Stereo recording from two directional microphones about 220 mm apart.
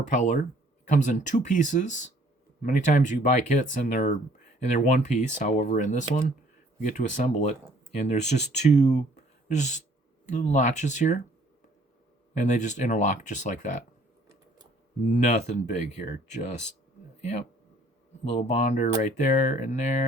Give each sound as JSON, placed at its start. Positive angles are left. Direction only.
{"t": 0.1, "sound": "speech", "side_deg": 35}
{"t": 12.3, "sound": "speech", "side_deg": 35}
{"t": 15.0, "sound": "speech", "side_deg": 35}
{"t": 17.2, "sound": "speech", "side_deg": 30}
{"t": 18.4, "sound": "speech", "side_deg": 30}